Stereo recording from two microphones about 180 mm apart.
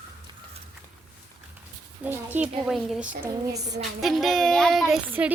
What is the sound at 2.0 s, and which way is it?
A woman's voice, 10° right (ahead or behind).